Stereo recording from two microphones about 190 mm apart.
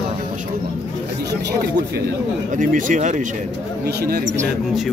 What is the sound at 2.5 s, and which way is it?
Speech, 45° right (ahead or behind).